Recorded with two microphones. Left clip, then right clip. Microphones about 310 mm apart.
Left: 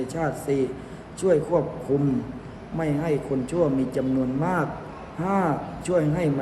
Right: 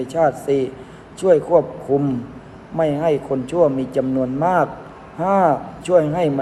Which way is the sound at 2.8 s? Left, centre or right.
Centre.